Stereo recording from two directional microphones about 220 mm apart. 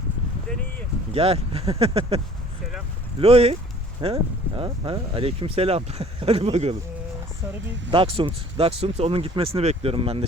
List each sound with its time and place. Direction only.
1.1 s speech: 25° right (ahead or behind)
7.9 s speech: 25° right (ahead or behind)